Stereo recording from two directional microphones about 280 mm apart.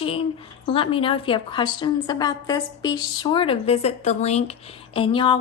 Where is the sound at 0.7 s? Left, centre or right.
Centre.